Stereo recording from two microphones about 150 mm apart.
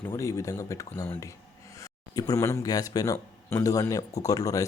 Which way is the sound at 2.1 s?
20° left (ahead or behind).